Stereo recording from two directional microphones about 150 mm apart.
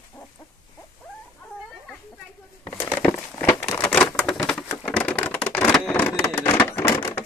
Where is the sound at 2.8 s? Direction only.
15° left (ahead or behind).